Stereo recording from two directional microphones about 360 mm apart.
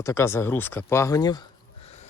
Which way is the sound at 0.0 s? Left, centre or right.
Centre.